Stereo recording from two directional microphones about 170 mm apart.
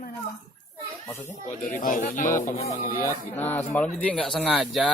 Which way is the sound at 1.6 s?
50° left (ahead or behind).